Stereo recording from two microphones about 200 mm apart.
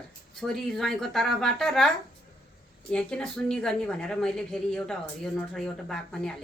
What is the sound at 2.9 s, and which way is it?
A woman's voice, 5° left (ahead or behind).